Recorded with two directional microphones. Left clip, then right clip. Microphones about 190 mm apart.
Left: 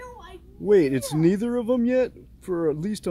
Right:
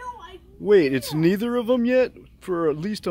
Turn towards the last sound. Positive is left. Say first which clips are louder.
# right 2 dB
turn(degrees=-10)  # may be behind; listen again after turning